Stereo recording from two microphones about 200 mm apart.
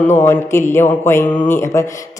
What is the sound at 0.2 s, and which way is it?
Speech, 15° left (ahead or behind).